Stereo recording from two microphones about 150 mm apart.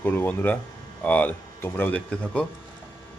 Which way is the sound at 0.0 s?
10° left (ahead or behind).